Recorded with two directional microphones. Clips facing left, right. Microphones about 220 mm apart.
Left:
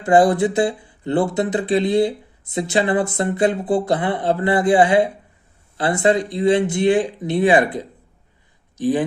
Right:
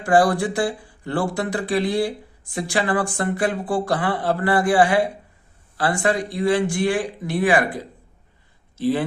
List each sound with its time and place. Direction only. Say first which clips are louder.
0.0 s speech: left 3 dB; 20° left (ahead or behind)
8.8 s speech: left 2 dB; 15° left (ahead or behind)